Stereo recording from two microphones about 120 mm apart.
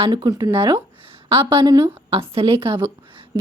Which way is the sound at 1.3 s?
50° right (ahead or behind).